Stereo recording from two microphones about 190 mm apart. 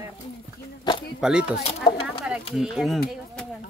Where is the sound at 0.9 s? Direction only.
25° left (ahead or behind).